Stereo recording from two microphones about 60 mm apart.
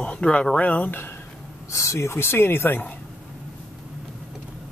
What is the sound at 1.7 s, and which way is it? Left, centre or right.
Speech, left.